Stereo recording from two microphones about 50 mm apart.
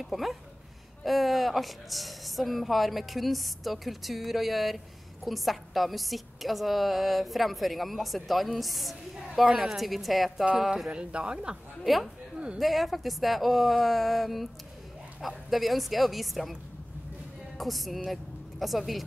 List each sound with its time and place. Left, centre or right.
0.0 s speech: centre
10.9 s speech: right
11.8 s speech: centre
17.6 s a woman's voice: centre